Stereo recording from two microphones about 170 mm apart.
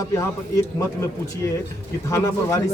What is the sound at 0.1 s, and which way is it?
A man's voice, 20° left (ahead or behind).